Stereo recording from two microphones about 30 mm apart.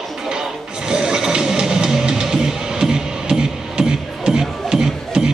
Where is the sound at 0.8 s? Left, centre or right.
Right.